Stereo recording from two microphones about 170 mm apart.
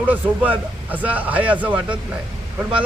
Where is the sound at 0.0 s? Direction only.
10° right (ahead or behind).